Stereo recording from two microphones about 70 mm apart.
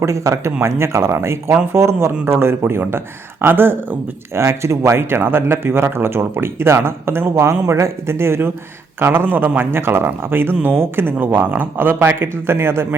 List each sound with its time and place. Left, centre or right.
0.0 s speech: right
4.4 s speech: right